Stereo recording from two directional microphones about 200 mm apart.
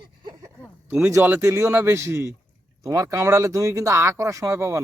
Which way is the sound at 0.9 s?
5° right (ahead or behind).